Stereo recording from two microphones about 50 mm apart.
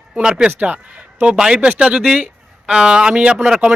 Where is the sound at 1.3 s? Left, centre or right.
Centre.